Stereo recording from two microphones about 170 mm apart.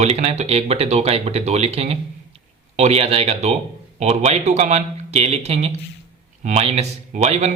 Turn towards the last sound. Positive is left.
turn(degrees=-40)  # may be behind; listen again after turning